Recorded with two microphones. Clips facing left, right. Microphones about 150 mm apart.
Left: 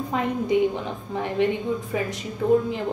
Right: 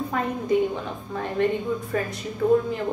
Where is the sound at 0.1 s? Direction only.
20° left (ahead or behind).